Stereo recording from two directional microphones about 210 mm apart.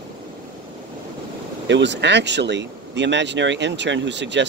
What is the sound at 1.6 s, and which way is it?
Speech, 60° right (ahead or behind).